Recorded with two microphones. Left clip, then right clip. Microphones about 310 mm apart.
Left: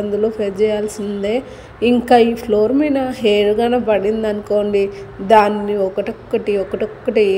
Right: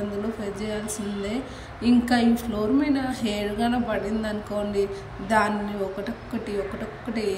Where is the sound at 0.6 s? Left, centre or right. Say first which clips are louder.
Left 14 dB; centre.